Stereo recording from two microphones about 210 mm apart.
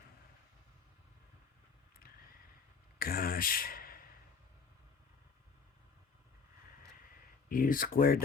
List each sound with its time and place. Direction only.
3.0 s speech: 45° left (ahead or behind)
7.5 s speech: 40° left (ahead or behind)